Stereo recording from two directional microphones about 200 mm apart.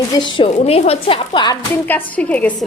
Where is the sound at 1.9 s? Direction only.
5° left (ahead or behind).